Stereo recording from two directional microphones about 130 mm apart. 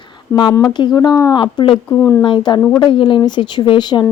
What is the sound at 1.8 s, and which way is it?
Speech, 15° left (ahead or behind).